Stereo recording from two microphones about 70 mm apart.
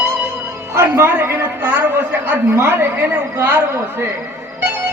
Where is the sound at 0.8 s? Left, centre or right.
Right.